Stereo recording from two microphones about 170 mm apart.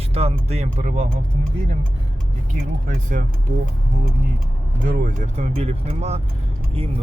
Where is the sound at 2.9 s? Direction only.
50° right (ahead or behind).